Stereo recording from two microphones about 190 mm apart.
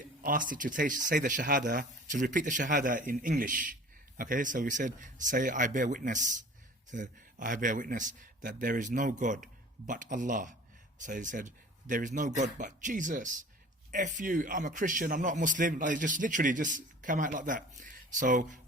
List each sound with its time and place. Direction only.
0.0 s a man's voice: 45° right (ahead or behind)